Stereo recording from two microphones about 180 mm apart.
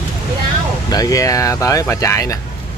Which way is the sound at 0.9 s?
20° left (ahead or behind).